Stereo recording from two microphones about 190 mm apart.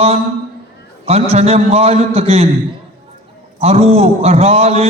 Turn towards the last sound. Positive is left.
turn(degrees=-35)  # may be behind; listen again after turning